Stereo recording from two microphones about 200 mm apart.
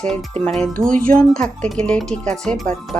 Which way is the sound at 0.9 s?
45° right (ahead or behind).